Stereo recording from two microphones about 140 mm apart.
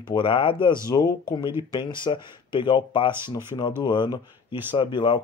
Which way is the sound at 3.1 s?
15° right (ahead or behind).